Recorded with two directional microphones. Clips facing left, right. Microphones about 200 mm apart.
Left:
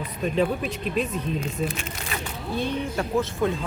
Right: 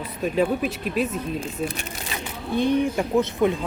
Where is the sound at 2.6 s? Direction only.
15° right (ahead or behind).